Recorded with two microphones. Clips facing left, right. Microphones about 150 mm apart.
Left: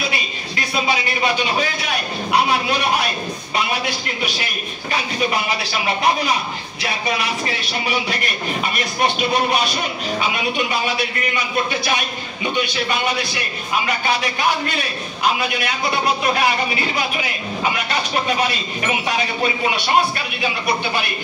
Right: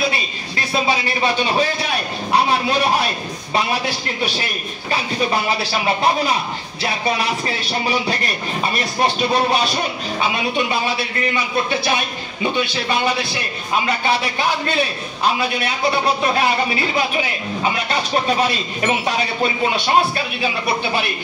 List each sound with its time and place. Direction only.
0.1 s speech: 30° right (ahead or behind)
3.5 s speech: 30° right (ahead or behind)
8.7 s speech: 30° right (ahead or behind)